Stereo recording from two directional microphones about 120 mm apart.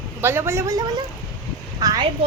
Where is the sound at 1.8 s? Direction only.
30° right (ahead or behind).